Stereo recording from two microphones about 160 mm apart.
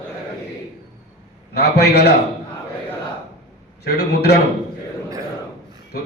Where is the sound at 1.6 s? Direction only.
90° left.